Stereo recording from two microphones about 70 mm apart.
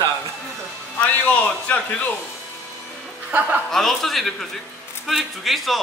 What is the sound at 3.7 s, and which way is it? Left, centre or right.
Speech, centre.